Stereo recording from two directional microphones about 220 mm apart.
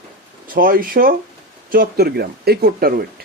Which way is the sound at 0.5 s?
40° right (ahead or behind).